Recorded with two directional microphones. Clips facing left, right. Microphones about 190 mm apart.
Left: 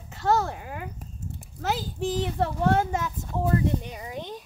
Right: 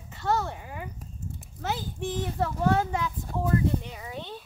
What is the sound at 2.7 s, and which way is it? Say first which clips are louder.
Speech: left 2 dB; 45° left (ahead or behind).